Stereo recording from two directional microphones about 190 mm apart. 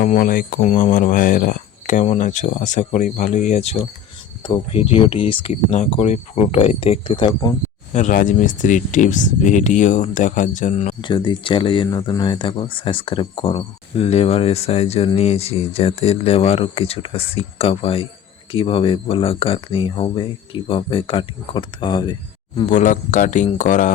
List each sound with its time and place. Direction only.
0.0 s speech: 45° left (ahead or behind); by 7.5 s 25° left (ahead or behind)
7.9 s speech: 40° left (ahead or behind)
11.0 s speech: 25° left (ahead or behind)
22.6 s speech: 40° left (ahead or behind)